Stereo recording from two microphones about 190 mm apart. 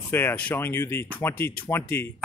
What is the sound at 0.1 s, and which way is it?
Speech, 10° left (ahead or behind).